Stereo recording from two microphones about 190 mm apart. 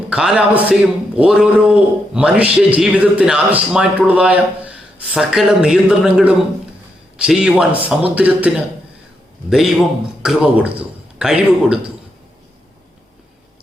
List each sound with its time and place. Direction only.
0.1 s a man's voice: 5° right (ahead or behind)